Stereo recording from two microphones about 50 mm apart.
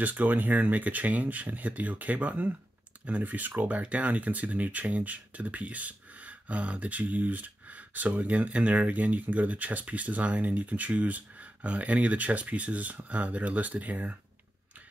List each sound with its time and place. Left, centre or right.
0.0 s speech: right